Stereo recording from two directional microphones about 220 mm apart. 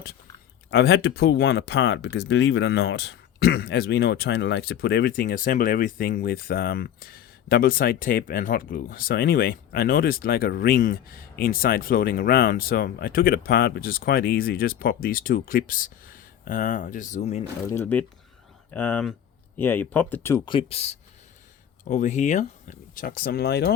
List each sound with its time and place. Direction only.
0.7 s speech: 45° left (ahead or behind); by 17.4 s 30° left (ahead or behind)
17.7 s speech: 10° left (ahead or behind); by 23.7 s 50° left (ahead or behind)